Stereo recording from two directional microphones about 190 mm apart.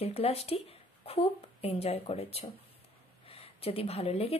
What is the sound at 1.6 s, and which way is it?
Speech, 30° left (ahead or behind).